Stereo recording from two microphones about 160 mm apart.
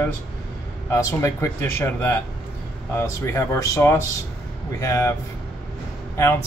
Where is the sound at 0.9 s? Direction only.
20° left (ahead or behind).